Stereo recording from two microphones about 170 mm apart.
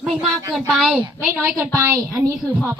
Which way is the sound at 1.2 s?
10° right (ahead or behind).